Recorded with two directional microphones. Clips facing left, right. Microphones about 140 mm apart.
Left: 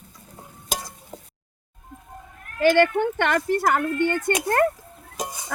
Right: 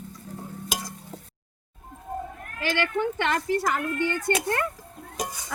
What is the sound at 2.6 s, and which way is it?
Speech, 50° left (ahead or behind).